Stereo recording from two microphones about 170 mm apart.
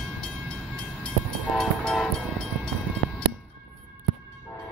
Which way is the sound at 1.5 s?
Centre (ahead or behind).